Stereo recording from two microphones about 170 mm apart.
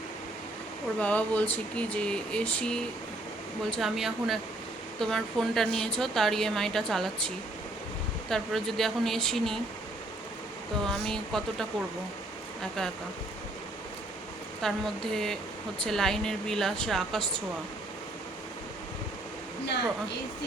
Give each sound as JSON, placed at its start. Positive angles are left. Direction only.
{"t": 0.9, "sound": "a woman's voice", "side_deg": 10}
{"t": 8.3, "sound": "a woman's voice", "side_deg": 0}
{"t": 10.8, "sound": "a woman's voice", "side_deg": 5}
{"t": 14.6, "sound": "a woman's voice", "side_deg": 0}
{"t": 19.6, "sound": "speech", "side_deg": 85}